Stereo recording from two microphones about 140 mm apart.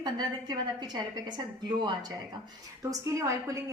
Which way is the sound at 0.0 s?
30° right (ahead or behind).